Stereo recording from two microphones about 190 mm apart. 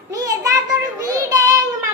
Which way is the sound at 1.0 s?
20° right (ahead or behind).